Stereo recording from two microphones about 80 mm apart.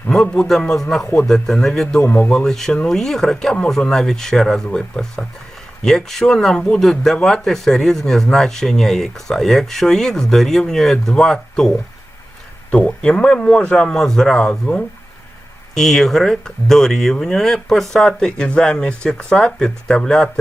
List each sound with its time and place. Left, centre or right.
0.1 s speech: centre
2.0 s speech: left
2.4 s speech: centre
12.7 s speech: centre